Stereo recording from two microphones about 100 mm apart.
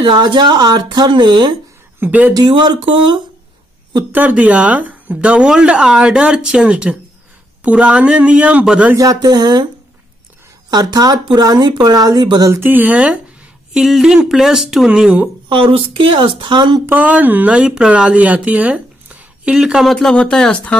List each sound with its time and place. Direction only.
0.0 s speech: 50° right (ahead or behind)
2.0 s speech: 15° right (ahead or behind)
2.3 s speech: 45° right (ahead or behind)
4.1 s speech: 15° right (ahead or behind)
8.9 s speech: 35° right (ahead or behind)
10.7 s speech: 40° right (ahead or behind)
12.4 s speech: 20° right (ahead or behind)
13.7 s speech: centre (ahead or behind)
15.4 s speech: 60° right (ahead or behind)
16.8 s speech: 15° right (ahead or behind); by 20.7 s 10° left (ahead or behind)